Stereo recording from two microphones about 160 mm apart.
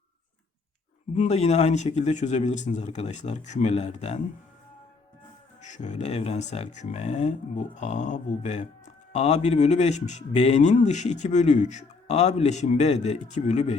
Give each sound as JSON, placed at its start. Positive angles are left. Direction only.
{"t": 1.1, "sound": "speech", "side_deg": 45}
{"t": 5.6, "sound": "speech", "side_deg": 50}